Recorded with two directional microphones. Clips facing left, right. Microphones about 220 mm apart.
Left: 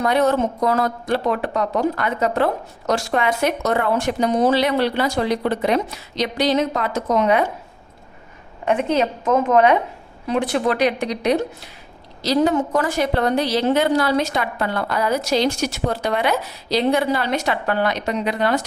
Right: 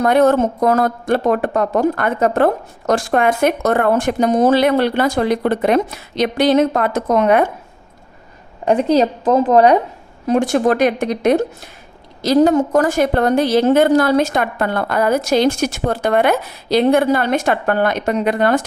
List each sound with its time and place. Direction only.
0.0 s a woman's voice: 50° right (ahead or behind)
8.6 s a woman's voice: 35° right (ahead or behind); by 18.6 s 50° right (ahead or behind)